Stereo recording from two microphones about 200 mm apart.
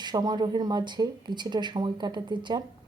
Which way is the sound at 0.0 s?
20° right (ahead or behind).